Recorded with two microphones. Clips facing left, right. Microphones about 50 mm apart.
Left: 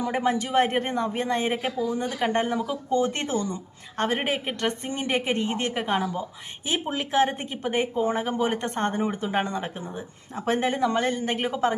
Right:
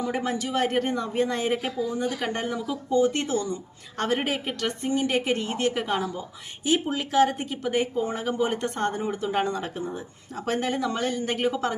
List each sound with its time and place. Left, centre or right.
0.0 s speech: left